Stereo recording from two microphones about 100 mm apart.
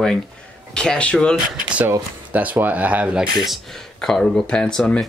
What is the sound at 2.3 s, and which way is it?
Speech, 15° right (ahead or behind).